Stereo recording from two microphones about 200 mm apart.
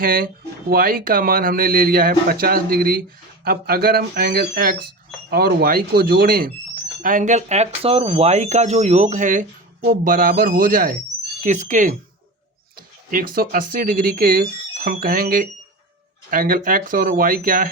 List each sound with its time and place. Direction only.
0.0 s speech: 45° right (ahead or behind)